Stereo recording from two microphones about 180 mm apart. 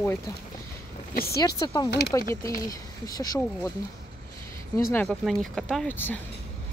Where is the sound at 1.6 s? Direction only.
25° left (ahead or behind).